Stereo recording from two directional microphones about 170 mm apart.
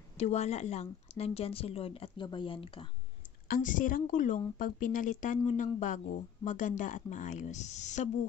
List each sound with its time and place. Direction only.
0.2 s speech: 40° left (ahead or behind)
3.4 s speech: 55° left (ahead or behind)